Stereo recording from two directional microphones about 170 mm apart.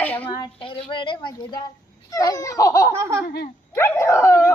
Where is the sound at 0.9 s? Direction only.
30° left (ahead or behind).